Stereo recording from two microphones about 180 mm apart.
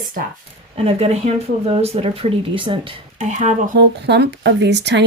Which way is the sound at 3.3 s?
40° right (ahead or behind).